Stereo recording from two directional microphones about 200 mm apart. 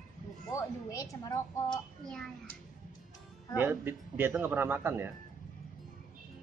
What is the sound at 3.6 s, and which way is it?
A man's voice, 10° right (ahead or behind).